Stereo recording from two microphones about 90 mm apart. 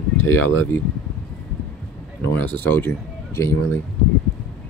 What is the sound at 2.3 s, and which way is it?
Speech, 20° left (ahead or behind).